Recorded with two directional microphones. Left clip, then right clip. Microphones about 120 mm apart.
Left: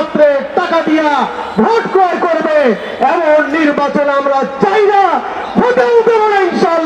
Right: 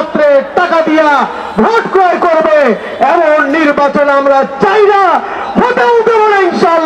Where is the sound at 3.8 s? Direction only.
40° right (ahead or behind).